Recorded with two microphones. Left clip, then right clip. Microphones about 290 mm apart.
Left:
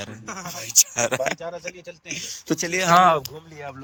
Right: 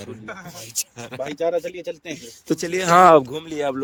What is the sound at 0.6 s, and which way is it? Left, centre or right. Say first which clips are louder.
Speech: left 13 dB; centre.